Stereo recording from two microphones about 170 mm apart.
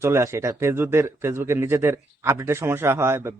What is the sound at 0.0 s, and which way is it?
A man's voice, 15° right (ahead or behind).